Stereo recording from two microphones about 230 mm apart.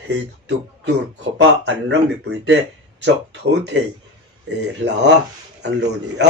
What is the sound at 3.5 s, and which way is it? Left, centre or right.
Speech, right.